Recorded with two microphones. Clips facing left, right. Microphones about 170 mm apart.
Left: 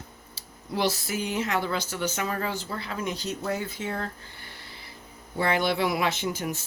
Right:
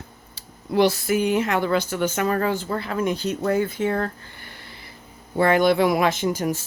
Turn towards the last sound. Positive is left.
turn(degrees=-45)  # may be behind; listen again after turning